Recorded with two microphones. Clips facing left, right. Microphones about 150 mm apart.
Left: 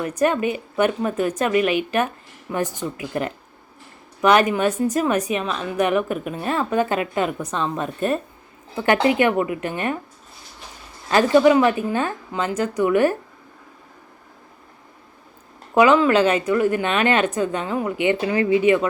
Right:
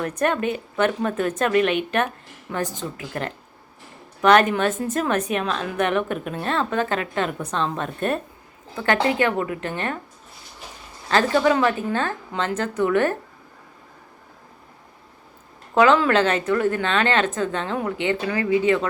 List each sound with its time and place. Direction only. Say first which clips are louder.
0.2 s a woman's voice: left 3 dB; 5° left (ahead or behind)
7.5 s a woman's voice: left 1 dB; 5° left (ahead or behind)
8.7 s a woman's voice: left 3 dB; 15° left (ahead or behind)
11.1 s a woman's voice: left 4 dB; 15° left (ahead or behind)
12.3 s a woman's voice: left 2 dB; centre (ahead or behind)
15.7 s a woman's voice: left 2 dB; 10° left (ahead or behind)